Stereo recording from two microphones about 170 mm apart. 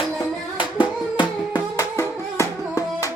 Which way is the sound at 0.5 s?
25° left (ahead or behind).